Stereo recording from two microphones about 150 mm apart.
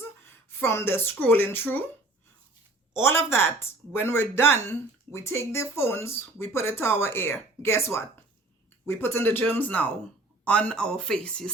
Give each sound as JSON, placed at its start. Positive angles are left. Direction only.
{"t": 0.6, "sound": "speech", "side_deg": 15}
{"t": 2.9, "sound": "speech", "side_deg": 15}